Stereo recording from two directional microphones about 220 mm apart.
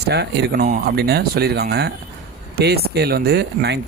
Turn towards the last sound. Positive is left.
turn(degrees=-50)  # may be behind; listen again after turning